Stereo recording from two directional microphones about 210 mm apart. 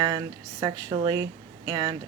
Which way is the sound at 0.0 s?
20° right (ahead or behind).